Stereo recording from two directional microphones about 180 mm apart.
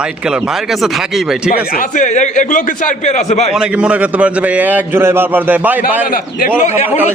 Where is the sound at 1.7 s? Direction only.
45° left (ahead or behind).